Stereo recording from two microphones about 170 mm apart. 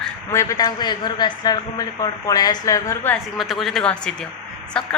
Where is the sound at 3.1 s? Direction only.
Centre (ahead or behind).